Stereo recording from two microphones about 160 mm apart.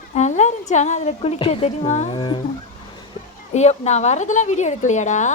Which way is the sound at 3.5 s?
45° left (ahead or behind).